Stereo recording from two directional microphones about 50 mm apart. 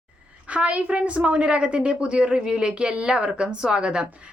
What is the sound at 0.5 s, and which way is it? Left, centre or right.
A woman's voice, right.